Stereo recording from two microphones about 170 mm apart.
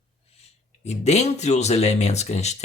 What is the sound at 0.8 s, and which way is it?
Speech, 40° left (ahead or behind).